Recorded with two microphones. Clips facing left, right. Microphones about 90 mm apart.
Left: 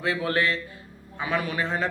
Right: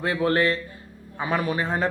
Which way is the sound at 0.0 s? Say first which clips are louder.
Right 3 dB; 35° right (ahead or behind).